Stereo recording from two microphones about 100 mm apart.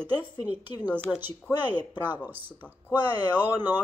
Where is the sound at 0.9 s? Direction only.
20° right (ahead or behind).